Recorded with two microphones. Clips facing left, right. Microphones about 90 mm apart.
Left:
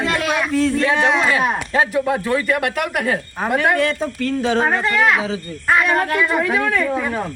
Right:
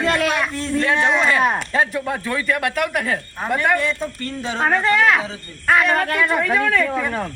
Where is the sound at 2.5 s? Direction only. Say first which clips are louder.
Left 1 dB; 55° left (ahead or behind).